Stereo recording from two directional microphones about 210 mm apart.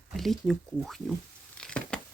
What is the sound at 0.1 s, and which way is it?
Speech, centre (ahead or behind).